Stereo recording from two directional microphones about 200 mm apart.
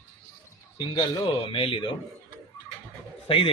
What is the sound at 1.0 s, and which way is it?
Speech, 25° left (ahead or behind).